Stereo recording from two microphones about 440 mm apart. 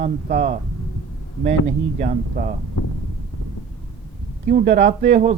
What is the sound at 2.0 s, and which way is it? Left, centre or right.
Speech, centre.